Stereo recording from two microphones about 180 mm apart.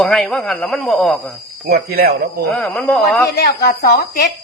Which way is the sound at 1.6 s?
60° right (ahead or behind).